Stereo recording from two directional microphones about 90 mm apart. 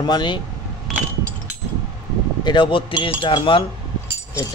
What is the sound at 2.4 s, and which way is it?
Speech, 60° left (ahead or behind).